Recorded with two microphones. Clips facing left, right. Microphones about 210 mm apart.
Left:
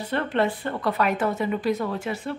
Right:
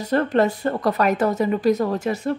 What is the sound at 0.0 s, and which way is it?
Speech, 40° right (ahead or behind).